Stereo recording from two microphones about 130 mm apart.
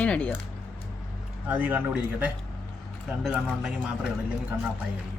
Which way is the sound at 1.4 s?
15° right (ahead or behind).